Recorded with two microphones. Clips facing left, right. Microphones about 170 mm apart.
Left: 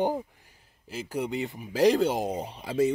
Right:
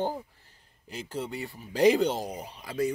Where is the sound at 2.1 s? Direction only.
25° left (ahead or behind).